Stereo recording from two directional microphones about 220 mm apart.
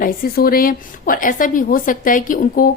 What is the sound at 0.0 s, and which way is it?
A woman's voice, 40° left (ahead or behind).